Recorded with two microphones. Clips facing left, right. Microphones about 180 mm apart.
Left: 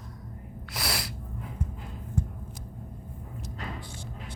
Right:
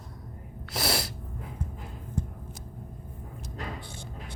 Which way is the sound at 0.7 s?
25° right (ahead or behind).